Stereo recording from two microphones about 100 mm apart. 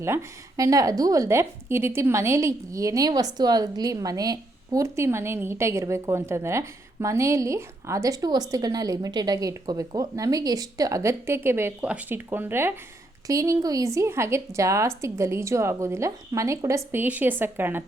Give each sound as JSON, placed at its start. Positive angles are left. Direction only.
{"t": 0.0, "sound": "a woman's voice", "side_deg": -30}
{"t": 13.2, "sound": "a woman's voice", "side_deg": -35}
{"t": 17.0, "sound": "a woman's voice", "side_deg": -20}